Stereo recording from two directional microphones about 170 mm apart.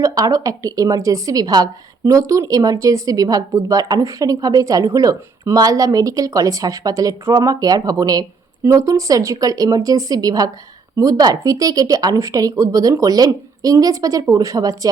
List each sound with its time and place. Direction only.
0.0 s a woman's voice: 20° right (ahead or behind)